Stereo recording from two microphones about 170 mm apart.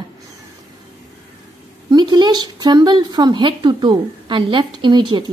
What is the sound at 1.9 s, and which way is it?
Speech, 25° right (ahead or behind).